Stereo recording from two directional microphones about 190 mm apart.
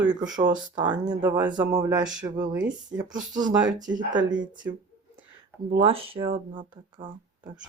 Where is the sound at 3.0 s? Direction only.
40° right (ahead or behind).